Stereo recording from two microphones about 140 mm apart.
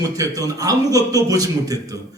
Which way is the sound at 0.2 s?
25° right (ahead or behind).